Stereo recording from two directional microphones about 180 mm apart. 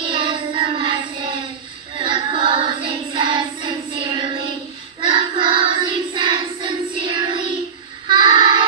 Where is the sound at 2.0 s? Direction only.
25° right (ahead or behind).